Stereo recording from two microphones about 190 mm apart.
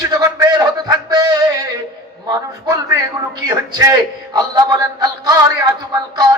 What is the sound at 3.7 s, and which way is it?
A man's voice, 20° right (ahead or behind).